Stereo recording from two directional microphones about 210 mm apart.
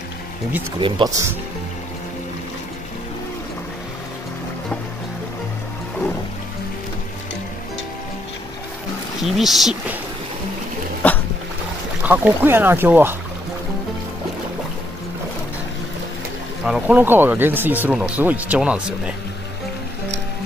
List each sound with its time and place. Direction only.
0.7 s speech: 25° right (ahead or behind)
9.2 s speech: centre (ahead or behind)
11.0 s dog: 5° left (ahead or behind)
12.0 s speech: 10° right (ahead or behind)
16.6 s speech: 5° right (ahead or behind)